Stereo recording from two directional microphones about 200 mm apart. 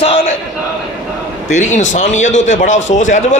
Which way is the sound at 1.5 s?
35° left (ahead or behind).